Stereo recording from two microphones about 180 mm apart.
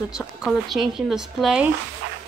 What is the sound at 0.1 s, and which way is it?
Speech, centre (ahead or behind).